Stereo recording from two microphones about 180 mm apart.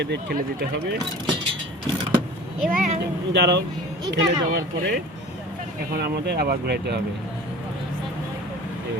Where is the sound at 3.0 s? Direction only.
70° right (ahead or behind).